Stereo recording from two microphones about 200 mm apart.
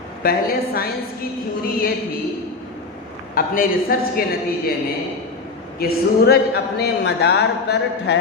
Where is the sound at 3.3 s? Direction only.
45° left (ahead or behind).